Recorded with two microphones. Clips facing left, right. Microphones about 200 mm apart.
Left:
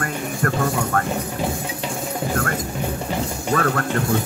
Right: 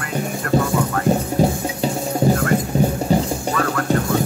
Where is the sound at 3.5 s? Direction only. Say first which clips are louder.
Left 4 dB; 45° left (ahead or behind).